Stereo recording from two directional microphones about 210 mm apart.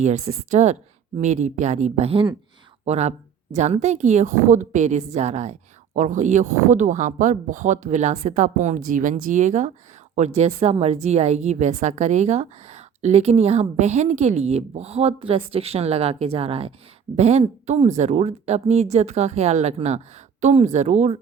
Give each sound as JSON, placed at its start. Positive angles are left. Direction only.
{"t": 0.0, "sound": "a woman's voice", "side_deg": -35}